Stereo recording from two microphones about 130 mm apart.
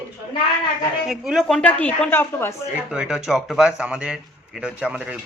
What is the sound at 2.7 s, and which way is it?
A man's voice, 5° right (ahead or behind).